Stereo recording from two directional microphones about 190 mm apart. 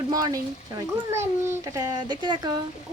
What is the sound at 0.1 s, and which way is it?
Speech, 20° right (ahead or behind).